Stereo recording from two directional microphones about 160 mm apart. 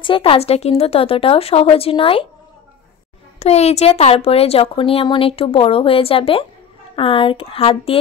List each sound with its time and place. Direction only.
0.0 s speech: 35° left (ahead or behind)
3.3 s speech: 40° left (ahead or behind)